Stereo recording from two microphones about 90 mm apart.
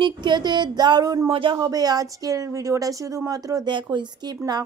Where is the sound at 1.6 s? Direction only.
45° right (ahead or behind).